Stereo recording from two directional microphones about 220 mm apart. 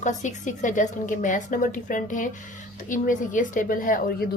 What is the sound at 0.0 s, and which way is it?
A woman's voice, 35° left (ahead or behind).